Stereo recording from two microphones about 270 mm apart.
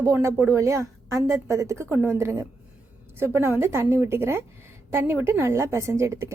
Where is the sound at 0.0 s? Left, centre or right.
Centre.